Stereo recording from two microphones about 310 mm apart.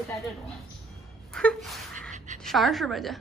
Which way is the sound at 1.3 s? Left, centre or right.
Centre.